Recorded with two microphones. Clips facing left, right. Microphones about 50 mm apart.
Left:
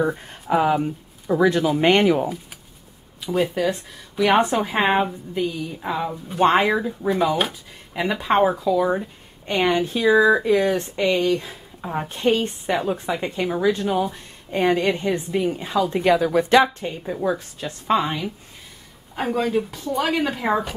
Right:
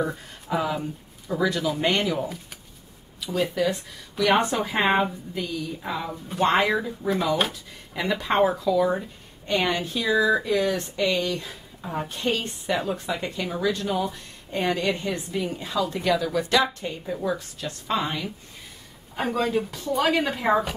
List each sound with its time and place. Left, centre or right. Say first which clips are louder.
0.0 s speech: left 5 dB; left
3.2 s speech: left 3 dB; left
19.1 s speech: left 2 dB; centre